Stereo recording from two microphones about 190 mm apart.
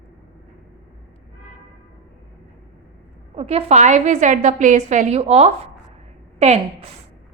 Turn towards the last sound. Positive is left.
turn(degrees=-35)  # may be behind; listen again after turning